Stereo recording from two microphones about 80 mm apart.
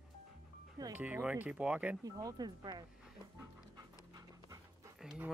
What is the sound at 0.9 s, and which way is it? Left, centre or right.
Speech, centre.